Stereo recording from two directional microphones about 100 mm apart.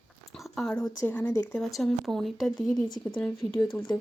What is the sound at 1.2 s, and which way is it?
Speech, 35° left (ahead or behind).